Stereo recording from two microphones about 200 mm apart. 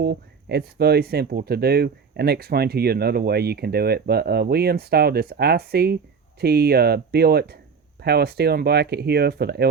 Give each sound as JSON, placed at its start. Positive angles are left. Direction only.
{"t": 0.0, "sound": "speech", "side_deg": -55}